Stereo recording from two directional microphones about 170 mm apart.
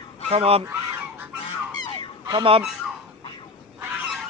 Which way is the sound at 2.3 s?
30° right (ahead or behind).